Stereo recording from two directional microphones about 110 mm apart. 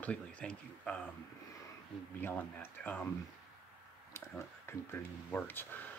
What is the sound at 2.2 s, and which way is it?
Speech, 15° left (ahead or behind).